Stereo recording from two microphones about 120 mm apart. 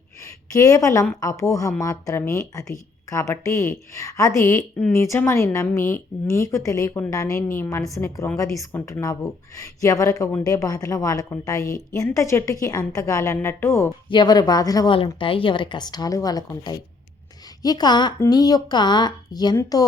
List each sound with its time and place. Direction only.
0.5 s speech: 30° left (ahead or behind)
14.1 s speech: 35° left (ahead or behind)
14.9 s speech: 45° left (ahead or behind)